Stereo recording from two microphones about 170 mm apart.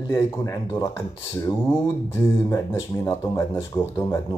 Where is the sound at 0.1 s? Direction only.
20° left (ahead or behind).